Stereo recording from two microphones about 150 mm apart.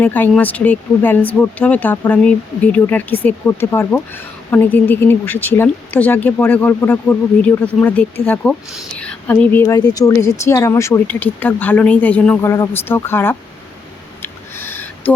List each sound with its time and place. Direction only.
0.0 s speech: 10° left (ahead or behind)
14.2 s owl: 15° left (ahead or behind)